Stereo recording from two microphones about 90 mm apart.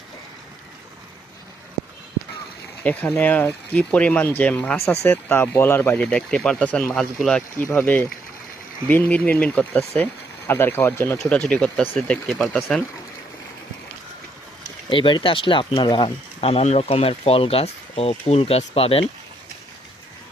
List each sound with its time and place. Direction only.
2.8 s speech: 15° left (ahead or behind)
6.0 s speech: 10° left (ahead or behind)
7.7 s speech: 20° left (ahead or behind)
11.2 s speech: 10° left (ahead or behind)
14.8 s speech: 65° left (ahead or behind); by 19.0 s 90° left